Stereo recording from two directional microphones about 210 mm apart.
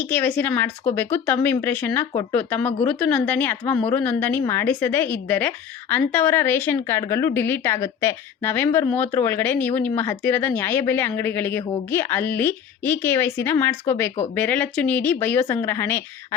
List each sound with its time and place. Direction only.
0.0 s a woman's voice: 10° left (ahead or behind)